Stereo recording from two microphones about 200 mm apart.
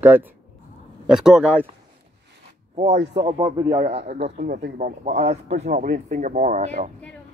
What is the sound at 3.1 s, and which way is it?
Speech, 25° right (ahead or behind).